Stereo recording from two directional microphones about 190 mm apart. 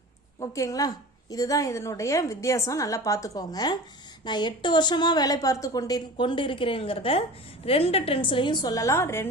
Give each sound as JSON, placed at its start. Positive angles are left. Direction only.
{"t": 0.3, "sound": "a woman's voice", "side_deg": 20}